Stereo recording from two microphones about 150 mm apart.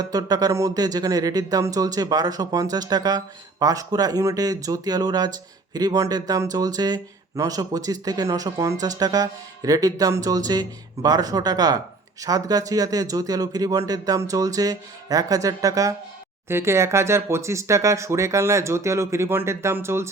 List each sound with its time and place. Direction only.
0.0 s speech: 25° right (ahead or behind)